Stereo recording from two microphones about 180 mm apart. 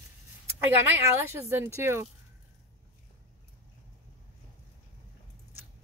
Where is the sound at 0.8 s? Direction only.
15° right (ahead or behind).